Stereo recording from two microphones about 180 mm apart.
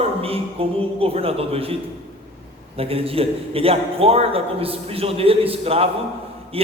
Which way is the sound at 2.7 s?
30° right (ahead or behind).